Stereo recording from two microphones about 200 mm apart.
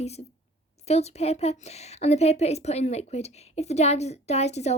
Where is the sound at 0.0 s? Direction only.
30° left (ahead or behind).